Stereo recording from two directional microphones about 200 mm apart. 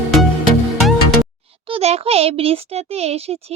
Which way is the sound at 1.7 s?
30° right (ahead or behind).